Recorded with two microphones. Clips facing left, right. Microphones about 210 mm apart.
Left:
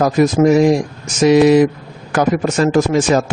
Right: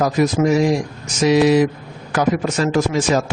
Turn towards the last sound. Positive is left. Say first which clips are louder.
# left 4 dB
turn(degrees=50)  # may be behind; listen again after turning